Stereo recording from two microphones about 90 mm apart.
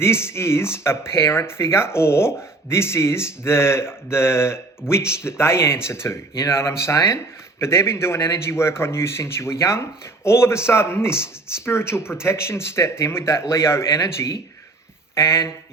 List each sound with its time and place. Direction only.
0.0 s speech: 30° left (ahead or behind)